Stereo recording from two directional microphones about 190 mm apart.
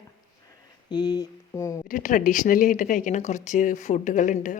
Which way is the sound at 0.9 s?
20° left (ahead or behind).